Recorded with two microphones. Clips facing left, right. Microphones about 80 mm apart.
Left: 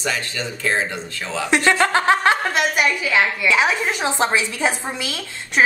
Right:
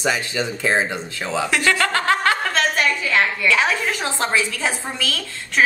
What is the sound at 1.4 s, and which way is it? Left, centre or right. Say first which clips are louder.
A woman's voice: left 4 dB; left.